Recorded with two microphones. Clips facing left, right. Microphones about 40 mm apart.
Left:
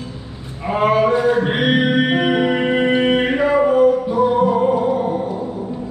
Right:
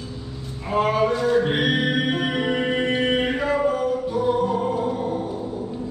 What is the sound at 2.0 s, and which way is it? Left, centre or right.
Music, left.